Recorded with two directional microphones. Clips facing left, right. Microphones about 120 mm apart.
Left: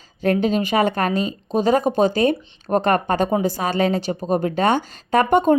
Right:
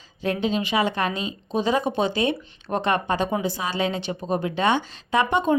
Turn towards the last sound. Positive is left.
turn(degrees=50)  # may be behind; listen again after turning